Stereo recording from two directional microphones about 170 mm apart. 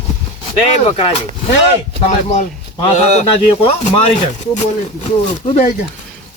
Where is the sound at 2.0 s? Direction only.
40° left (ahead or behind).